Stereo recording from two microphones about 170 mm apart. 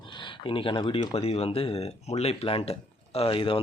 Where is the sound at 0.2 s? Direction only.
30° left (ahead or behind).